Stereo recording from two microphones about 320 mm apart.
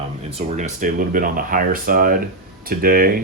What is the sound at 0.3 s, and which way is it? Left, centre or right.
Speech, right.